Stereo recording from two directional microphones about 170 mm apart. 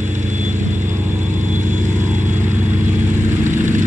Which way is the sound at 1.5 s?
45° right (ahead or behind).